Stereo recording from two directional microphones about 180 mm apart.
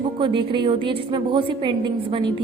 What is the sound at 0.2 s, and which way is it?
A woman's voice, 25° right (ahead or behind).